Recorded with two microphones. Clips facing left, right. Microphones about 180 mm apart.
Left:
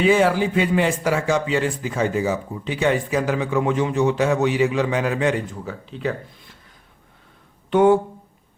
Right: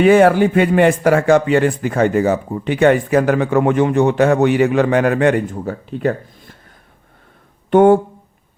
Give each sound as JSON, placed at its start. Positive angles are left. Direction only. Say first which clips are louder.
{"t": 0.0, "sound": "speech", "louder": "right 7 dB", "side_deg": -55}
{"t": 7.7, "sound": "speech", "louder": "right 5 dB", "side_deg": -50}